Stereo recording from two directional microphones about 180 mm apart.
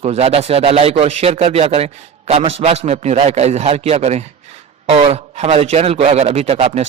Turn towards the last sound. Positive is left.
turn(degrees=-35)  # may be behind; listen again after turning